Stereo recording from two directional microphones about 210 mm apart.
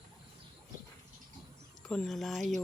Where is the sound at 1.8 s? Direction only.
5° left (ahead or behind).